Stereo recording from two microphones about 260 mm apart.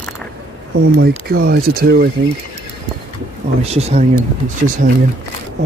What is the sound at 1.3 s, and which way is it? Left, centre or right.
Speech, right.